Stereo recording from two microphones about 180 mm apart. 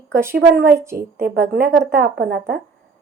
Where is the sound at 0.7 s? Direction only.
15° right (ahead or behind).